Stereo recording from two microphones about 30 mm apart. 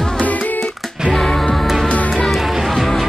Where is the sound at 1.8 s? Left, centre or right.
Left.